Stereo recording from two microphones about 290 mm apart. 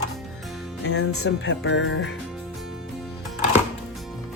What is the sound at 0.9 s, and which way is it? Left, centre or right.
Speech, left.